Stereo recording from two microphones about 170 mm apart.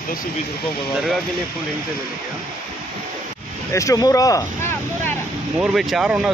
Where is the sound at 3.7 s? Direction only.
20° left (ahead or behind).